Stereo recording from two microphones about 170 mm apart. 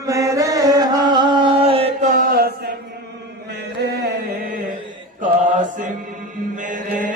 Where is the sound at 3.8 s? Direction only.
80° right.